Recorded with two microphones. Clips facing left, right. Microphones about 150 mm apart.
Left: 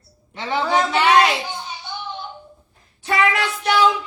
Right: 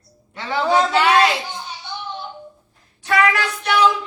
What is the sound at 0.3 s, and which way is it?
Speech, 20° left (ahead or behind).